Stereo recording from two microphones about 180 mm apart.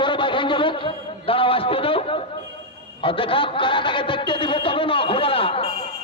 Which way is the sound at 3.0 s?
30° left (ahead or behind).